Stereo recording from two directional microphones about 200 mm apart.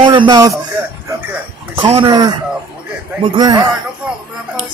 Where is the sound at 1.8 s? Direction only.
25° right (ahead or behind).